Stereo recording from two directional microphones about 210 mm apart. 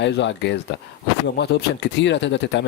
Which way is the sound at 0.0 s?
60° left (ahead or behind).